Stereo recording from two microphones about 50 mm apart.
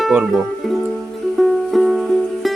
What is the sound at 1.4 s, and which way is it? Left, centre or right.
Music, centre.